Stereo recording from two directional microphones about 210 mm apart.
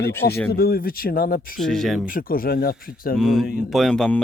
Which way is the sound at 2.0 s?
45° left (ahead or behind).